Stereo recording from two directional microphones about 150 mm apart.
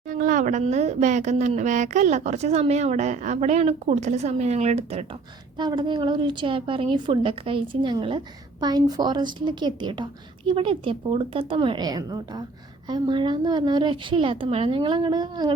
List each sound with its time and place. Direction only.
0.1 s a woman's voice: 60° right (ahead or behind); by 5.0 s 45° right (ahead or behind)
5.5 s a woman's voice: 30° right (ahead or behind)